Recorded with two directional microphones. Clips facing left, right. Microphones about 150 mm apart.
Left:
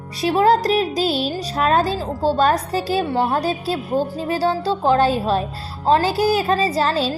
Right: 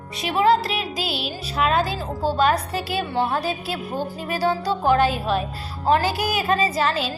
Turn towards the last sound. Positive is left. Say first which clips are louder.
# left 3 dB
turn(degrees=35)  # may be behind; listen again after turning